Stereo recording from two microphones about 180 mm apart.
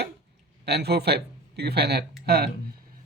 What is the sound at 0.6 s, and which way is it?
Speech, 65° right (ahead or behind).